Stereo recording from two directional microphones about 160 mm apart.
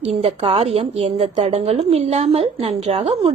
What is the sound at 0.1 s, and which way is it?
A woman's voice, 35° right (ahead or behind).